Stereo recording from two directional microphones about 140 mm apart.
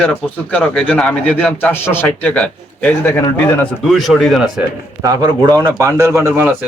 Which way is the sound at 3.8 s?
Centre (ahead or behind).